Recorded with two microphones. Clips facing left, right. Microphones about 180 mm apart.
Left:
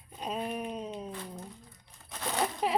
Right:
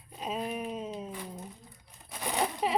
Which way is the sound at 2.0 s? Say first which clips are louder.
Right 1 dB; 10° right (ahead or behind).